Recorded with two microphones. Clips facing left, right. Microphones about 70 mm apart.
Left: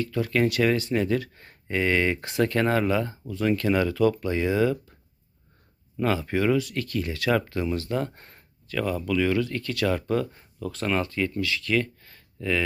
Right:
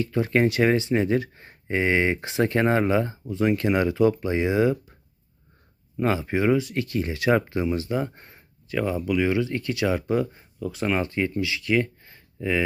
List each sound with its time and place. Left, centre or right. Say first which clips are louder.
0.0 s speech: right 2 dB; right
6.0 s speech: right 1 dB; right; by 8.4 s centre
8.6 s speech: right 2 dB; right